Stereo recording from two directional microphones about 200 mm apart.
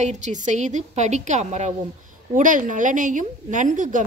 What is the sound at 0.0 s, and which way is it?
A woman's voice, 35° right (ahead or behind).